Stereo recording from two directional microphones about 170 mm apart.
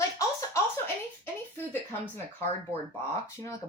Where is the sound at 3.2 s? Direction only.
20° left (ahead or behind).